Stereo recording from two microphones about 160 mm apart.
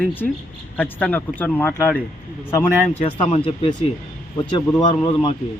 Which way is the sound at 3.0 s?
35° left (ahead or behind).